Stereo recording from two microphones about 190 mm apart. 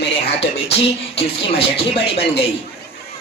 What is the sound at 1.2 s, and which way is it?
Speech, 30° left (ahead or behind).